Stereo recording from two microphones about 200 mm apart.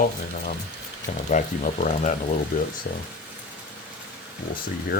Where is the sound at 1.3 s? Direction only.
40° left (ahead or behind).